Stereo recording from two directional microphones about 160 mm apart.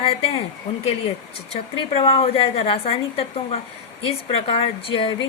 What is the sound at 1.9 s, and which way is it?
A woman's voice, 35° left (ahead or behind).